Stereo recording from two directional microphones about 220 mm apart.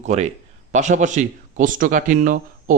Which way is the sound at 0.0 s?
30° right (ahead or behind).